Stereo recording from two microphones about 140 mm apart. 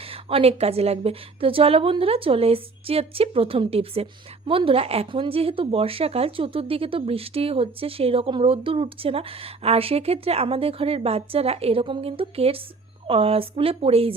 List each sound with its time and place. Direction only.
0.1 s a woman's voice: 40° right (ahead or behind)